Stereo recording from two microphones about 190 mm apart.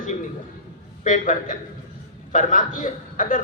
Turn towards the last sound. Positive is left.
turn(degrees=45)  # may be behind; listen again after turning